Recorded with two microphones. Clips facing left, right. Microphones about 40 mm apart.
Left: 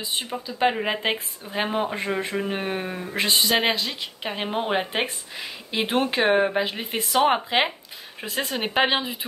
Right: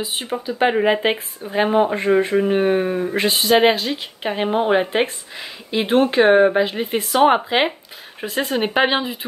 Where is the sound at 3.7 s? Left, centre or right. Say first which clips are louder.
Right 5 dB; right.